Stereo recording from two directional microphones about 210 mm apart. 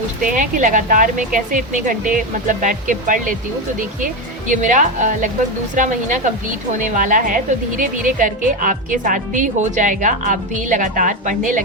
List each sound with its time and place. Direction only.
0.2 s a woman's voice: 40° right (ahead or behind)